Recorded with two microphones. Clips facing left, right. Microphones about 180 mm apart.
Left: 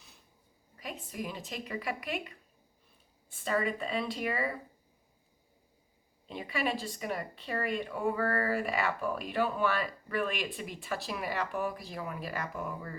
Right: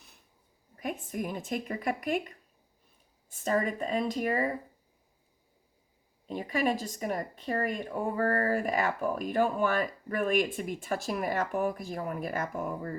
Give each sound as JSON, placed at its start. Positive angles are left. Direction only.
{"t": 0.8, "sound": "speech", "side_deg": -50}
{"t": 6.2, "sound": "speech", "side_deg": -45}